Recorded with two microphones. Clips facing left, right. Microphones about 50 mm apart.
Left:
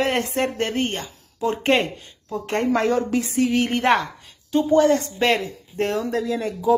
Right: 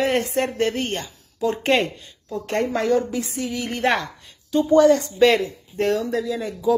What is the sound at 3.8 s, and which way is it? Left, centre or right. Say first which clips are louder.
Speech: left 2 dB; left.